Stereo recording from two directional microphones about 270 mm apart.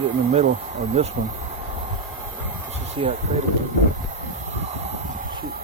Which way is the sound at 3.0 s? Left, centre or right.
Centre.